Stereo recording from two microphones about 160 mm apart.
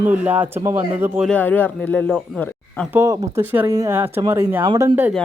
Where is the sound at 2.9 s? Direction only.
20° right (ahead or behind).